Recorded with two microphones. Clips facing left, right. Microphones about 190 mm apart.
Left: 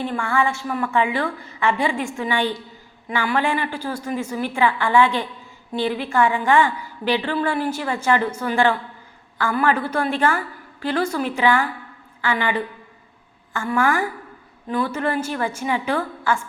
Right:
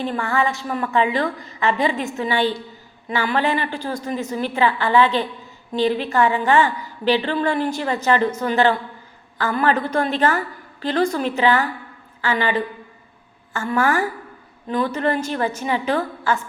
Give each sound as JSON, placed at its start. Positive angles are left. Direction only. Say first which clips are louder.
{"t": 0.2, "sound": "a woman's voice", "louder": "left 1 dB", "side_deg": 10}
{"t": 0.6, "sound": "a woman's voice", "louder": "even", "side_deg": -25}
{"t": 0.9, "sound": "a woman's voice", "louder": "right 2 dB", "side_deg": 10}